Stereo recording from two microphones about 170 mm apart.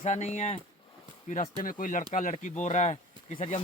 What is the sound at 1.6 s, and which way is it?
Speech, 55° left (ahead or behind).